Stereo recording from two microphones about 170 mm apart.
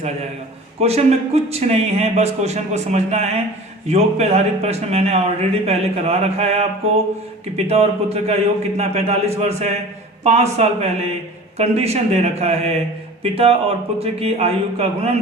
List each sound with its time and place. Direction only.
0.8 s speech: 40° right (ahead or behind)